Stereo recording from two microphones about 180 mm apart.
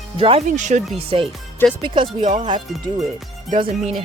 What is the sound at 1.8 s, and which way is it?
Speech, 25° right (ahead or behind).